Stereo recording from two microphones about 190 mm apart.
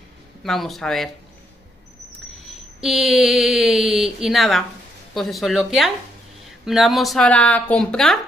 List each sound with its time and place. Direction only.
0.4 s speech: centre (ahead or behind)
2.3 s a sound: centre (ahead or behind)
5.1 s speech: centre (ahead or behind)